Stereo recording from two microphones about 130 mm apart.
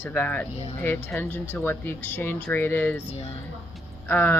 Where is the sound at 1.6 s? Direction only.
15° left (ahead or behind).